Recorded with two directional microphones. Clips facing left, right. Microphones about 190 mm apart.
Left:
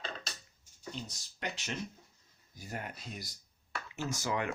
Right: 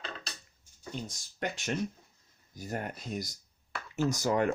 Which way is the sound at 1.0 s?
50° right (ahead or behind).